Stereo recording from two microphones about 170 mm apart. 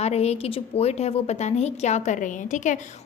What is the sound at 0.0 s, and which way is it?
A woman's voice, 40° left (ahead or behind).